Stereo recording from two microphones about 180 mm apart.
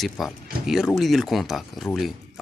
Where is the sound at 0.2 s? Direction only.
Centre (ahead or behind).